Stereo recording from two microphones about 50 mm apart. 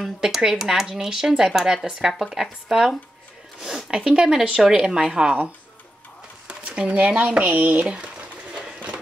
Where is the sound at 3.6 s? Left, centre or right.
Centre.